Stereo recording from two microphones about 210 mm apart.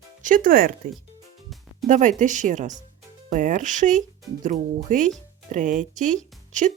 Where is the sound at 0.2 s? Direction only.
40° right (ahead or behind).